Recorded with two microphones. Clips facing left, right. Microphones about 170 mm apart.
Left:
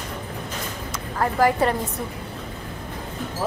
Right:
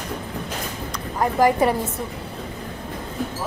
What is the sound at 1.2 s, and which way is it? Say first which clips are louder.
Speech: right 2 dB; 15° right (ahead or behind).